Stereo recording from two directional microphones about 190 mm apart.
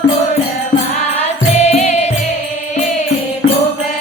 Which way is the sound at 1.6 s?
35° left (ahead or behind).